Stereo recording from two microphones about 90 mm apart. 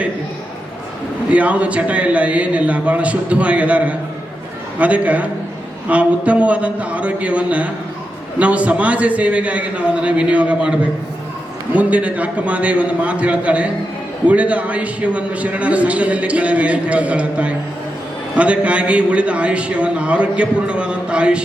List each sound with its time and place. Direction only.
1.3 s a man's voice: 15° right (ahead or behind)